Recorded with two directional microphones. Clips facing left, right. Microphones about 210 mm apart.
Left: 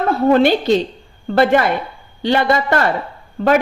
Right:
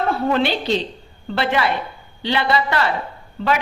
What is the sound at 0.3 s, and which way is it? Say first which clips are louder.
A woman's voice: left 9 dB; 45° left (ahead or behind).